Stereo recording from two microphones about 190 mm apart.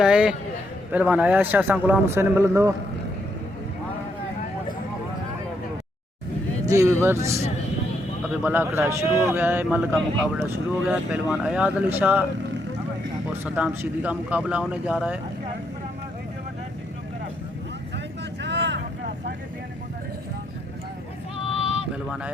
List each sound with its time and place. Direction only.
0.0 s a man's voice: 5° right (ahead or behind)
6.7 s speech: 15° right (ahead or behind)
13.4 s speech: 10° right (ahead or behind)
18.4 s vehicle: 70° right (ahead or behind)